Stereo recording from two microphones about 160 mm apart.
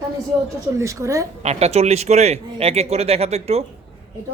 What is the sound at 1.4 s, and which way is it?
Speech, 40° right (ahead or behind).